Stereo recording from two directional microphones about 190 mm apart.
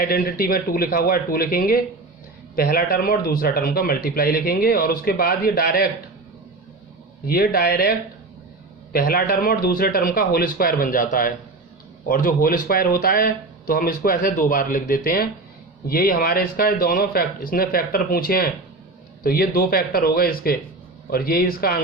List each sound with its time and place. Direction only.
0.0 s a man's voice: 50° left (ahead or behind)
7.3 s a man's voice: 55° left (ahead or behind)